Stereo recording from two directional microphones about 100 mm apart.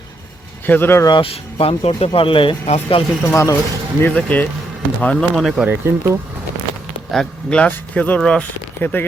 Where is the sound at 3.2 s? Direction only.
30° left (ahead or behind).